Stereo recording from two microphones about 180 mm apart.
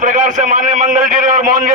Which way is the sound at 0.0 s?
45° right (ahead or behind).